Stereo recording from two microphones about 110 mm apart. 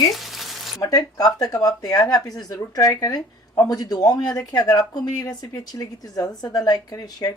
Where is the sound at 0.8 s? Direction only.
35° left (ahead or behind).